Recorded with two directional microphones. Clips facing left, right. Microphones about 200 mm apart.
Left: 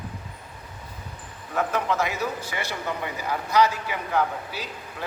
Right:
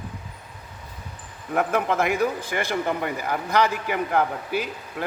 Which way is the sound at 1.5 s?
55° right (ahead or behind).